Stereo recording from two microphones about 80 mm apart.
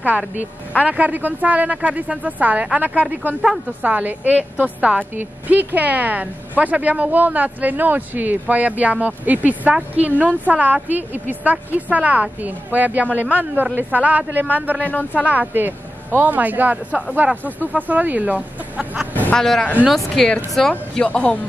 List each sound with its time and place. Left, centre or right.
0.8 s a woman's voice: centre
14.9 s speech: left
15.2 s a woman's voice: right
19.3 s speech: centre